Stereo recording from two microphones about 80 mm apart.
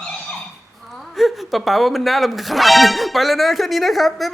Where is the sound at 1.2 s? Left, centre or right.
Centre.